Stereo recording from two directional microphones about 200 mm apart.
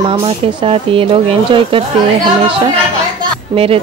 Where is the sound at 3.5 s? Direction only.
30° right (ahead or behind).